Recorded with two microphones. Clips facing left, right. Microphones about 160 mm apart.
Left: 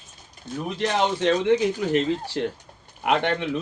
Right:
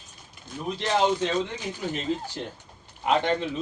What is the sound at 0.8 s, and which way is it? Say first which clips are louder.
Speech: even; 70° left (ahead or behind).